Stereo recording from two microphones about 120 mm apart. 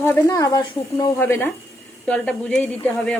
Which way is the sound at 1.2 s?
15° left (ahead or behind).